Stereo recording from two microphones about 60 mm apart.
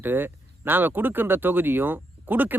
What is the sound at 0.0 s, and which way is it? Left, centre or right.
Speech, right.